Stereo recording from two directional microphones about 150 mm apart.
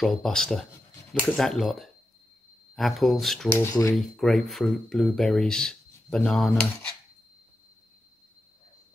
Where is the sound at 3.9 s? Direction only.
Centre (ahead or behind).